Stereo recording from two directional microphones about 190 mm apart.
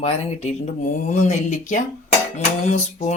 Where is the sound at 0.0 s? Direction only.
35° left (ahead or behind).